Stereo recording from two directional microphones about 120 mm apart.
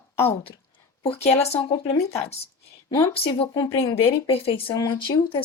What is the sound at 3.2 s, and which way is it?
Speech, 50° left (ahead or behind).